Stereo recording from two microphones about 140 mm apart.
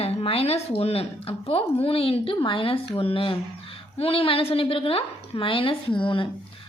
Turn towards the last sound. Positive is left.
turn(degrees=35)  # may be behind; listen again after turning